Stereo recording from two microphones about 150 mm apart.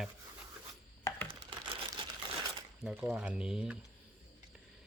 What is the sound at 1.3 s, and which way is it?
Crumpling, 35° right (ahead or behind).